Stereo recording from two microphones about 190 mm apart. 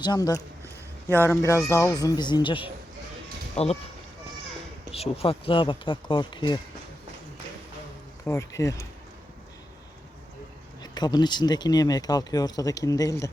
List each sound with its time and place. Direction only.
0.0 s speech: 20° left (ahead or behind)
4.9 s speech: 30° left (ahead or behind)
8.2 s speech: 15° left (ahead or behind)
10.9 s speech: 20° left (ahead or behind)